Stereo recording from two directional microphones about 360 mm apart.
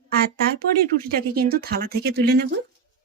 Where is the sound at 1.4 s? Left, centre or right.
Right.